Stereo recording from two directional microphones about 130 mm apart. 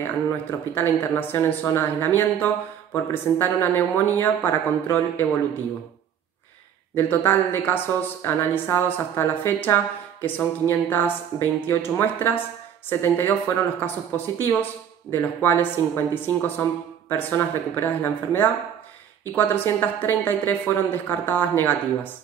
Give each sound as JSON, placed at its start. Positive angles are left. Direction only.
{"t": 0.0, "sound": "speech", "side_deg": 15}
{"t": 7.0, "sound": "speech", "side_deg": 15}